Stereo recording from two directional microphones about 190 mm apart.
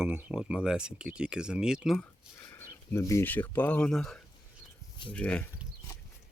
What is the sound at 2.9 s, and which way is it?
Speech, 15° left (ahead or behind).